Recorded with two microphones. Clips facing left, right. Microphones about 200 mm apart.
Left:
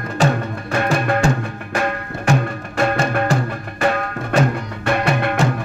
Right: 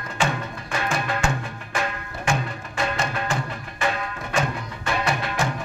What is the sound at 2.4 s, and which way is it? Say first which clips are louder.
Music: left 8 dB; 55° left (ahead or behind).